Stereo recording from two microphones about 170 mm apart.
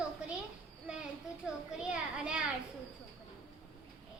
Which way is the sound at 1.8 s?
5° right (ahead or behind).